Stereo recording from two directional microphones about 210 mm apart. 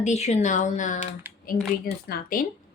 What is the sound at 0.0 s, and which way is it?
Speech, 30° left (ahead or behind).